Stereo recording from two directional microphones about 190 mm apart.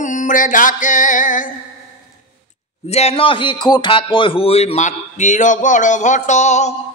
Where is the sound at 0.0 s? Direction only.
40° left (ahead or behind).